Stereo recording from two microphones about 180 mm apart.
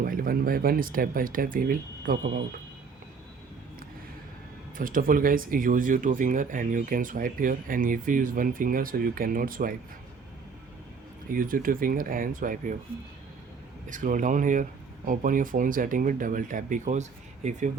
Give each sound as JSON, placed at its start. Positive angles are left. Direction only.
{"t": 0.0, "sound": "speech", "side_deg": -50}
{"t": 4.8, "sound": "speech", "side_deg": -50}
{"t": 11.3, "sound": "speech", "side_deg": -50}
{"t": 13.8, "sound": "speech", "side_deg": -45}